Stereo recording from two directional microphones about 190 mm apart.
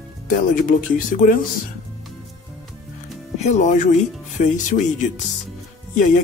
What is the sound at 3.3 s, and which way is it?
Speech, 35° left (ahead or behind).